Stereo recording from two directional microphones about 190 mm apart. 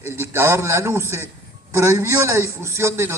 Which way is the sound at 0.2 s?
15° right (ahead or behind).